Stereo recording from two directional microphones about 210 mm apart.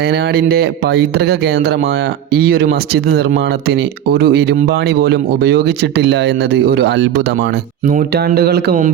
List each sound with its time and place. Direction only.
0.1 s speech: 50° right (ahead or behind)